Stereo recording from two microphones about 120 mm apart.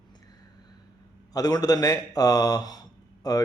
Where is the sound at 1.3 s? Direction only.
30° left (ahead or behind).